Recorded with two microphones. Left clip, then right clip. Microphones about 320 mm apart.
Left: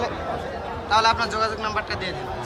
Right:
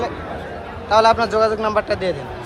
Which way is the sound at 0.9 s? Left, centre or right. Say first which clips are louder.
Right 6 dB; centre.